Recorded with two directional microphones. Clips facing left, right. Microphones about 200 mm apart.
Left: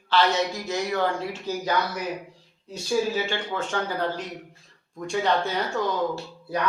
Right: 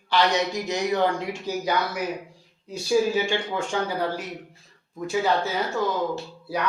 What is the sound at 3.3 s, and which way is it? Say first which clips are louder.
Speech: right 2 dB; 15° right (ahead or behind).